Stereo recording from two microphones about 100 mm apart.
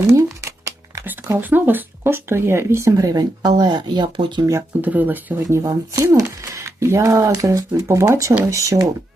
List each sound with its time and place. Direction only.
0.2 s a sound: 30° right (ahead or behind)
1.4 s speech: 20° right (ahead or behind); by 4.4 s 50° right (ahead or behind)
4.8 s speech: 15° right (ahead or behind)
5.5 s speech: 30° right (ahead or behind)